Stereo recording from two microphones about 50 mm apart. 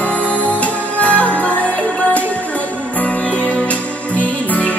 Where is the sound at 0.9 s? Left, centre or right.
Left.